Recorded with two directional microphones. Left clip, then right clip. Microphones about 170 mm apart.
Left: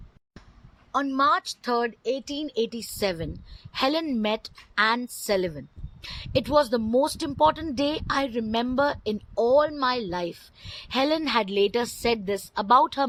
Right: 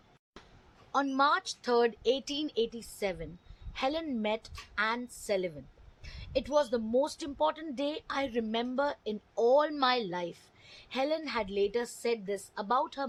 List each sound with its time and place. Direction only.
0.9 s speech: 15° left (ahead or behind)
2.1 s a woman's voice: 25° left (ahead or behind)
6.0 s a woman's voice: 45° left (ahead or behind)
8.3 s speech: 15° left (ahead or behind)
8.5 s a woman's voice: 35° left (ahead or behind)